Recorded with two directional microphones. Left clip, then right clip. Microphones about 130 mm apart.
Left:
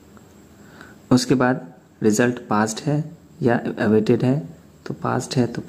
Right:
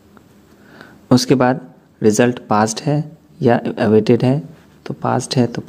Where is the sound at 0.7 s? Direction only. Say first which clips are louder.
Right 4 dB; 35° right (ahead or behind).